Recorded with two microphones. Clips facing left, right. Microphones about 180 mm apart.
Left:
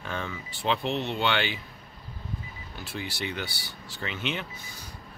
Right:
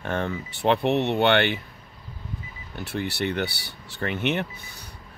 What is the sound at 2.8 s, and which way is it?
Speech, 60° right (ahead or behind).